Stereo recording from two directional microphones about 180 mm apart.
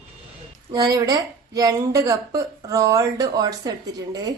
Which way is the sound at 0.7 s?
20° right (ahead or behind).